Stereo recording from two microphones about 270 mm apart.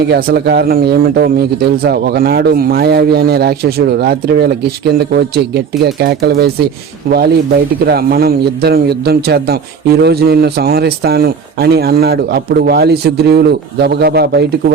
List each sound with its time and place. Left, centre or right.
0.1 s a man's voice: right
7.9 s a man's voice: right